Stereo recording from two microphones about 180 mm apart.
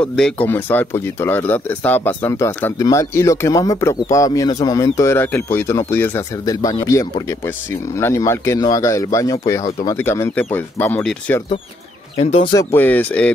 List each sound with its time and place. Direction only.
0.0 s speech: 5° left (ahead or behind)
12.2 s speech: 35° left (ahead or behind)
12.5 s speech: 10° left (ahead or behind)